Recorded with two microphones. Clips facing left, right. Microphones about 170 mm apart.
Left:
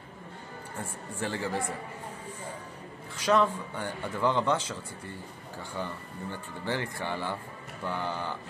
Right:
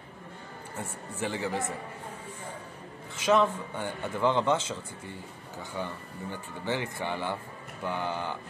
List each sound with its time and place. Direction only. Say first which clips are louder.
1.2 s speech: right 1 dB; 15° right (ahead or behind)
3.3 s speech: right 1 dB; 20° right (ahead or behind)
5.8 s speech: even; 15° right (ahead or behind)